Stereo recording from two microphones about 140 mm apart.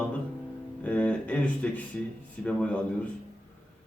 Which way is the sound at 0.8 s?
10° left (ahead or behind).